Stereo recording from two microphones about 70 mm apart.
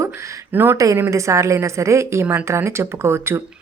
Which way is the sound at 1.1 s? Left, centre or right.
Right.